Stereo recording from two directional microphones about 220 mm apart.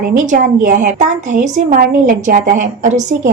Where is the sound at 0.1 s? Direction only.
35° right (ahead or behind).